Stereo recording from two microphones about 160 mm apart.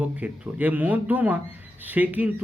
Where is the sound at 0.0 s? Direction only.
10° right (ahead or behind).